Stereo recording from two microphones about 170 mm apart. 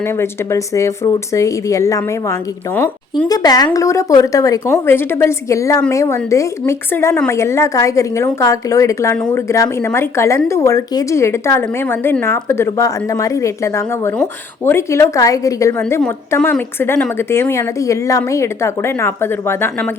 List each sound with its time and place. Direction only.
0.0 s a woman's voice: 15° left (ahead or behind)
3.2 s a woman's voice: 20° left (ahead or behind)
9.1 s speech: 5° left (ahead or behind)
9.5 s a woman's voice: 15° left (ahead or behind)
16.0 s a woman's voice: 5° left (ahead or behind)